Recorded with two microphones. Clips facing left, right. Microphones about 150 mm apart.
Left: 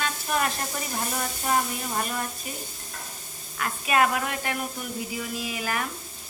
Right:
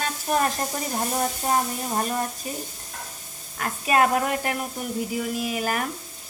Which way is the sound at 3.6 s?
40° right (ahead or behind).